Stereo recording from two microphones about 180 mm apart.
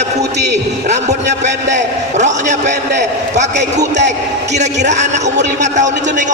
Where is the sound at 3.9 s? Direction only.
40° right (ahead or behind).